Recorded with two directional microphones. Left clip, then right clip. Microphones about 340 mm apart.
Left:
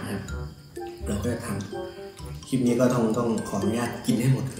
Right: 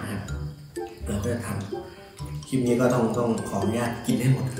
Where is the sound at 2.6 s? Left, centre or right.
Centre.